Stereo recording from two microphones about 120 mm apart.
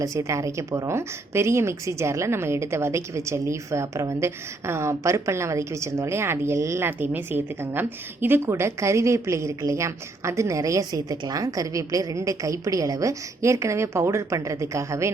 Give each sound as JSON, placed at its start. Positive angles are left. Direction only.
{"t": 0.0, "sound": "a woman's voice", "side_deg": -25}